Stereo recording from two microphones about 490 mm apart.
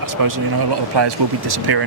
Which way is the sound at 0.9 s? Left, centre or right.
Right.